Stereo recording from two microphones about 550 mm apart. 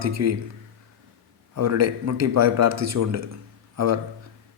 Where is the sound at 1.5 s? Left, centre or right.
Right.